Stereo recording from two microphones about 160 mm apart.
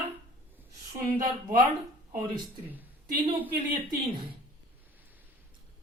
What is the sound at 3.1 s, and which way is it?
Speech, 30° right (ahead or behind).